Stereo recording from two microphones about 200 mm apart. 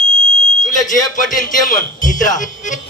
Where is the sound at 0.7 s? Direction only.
40° left (ahead or behind).